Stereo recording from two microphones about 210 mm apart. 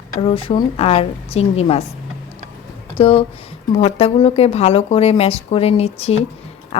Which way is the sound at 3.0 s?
25° left (ahead or behind).